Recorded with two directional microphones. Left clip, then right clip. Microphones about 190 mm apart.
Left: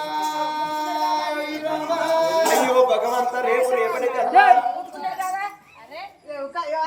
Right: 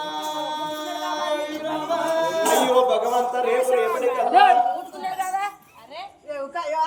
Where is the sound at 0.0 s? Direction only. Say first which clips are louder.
Left 4 dB; 5° left (ahead or behind).